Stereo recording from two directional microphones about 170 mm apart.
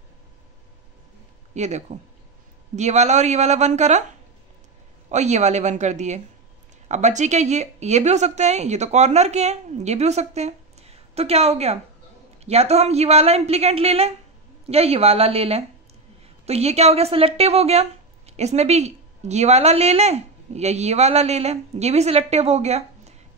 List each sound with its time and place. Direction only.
1.5 s speech: 40° right (ahead or behind)
5.1 s speech: 45° right (ahead or behind)